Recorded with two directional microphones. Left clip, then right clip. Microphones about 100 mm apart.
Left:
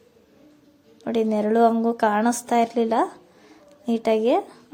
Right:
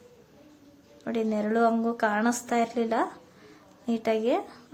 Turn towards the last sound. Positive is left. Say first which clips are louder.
# left 6 dB
turn(degrees=50)  # may be behind; listen again after turning